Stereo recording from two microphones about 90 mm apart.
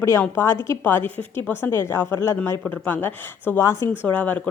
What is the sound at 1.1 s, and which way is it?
Speech, 20° left (ahead or behind).